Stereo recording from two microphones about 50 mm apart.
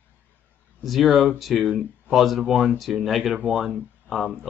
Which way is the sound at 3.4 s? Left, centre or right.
Right.